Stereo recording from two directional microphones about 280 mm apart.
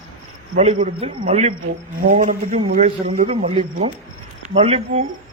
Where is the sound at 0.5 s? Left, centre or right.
Right.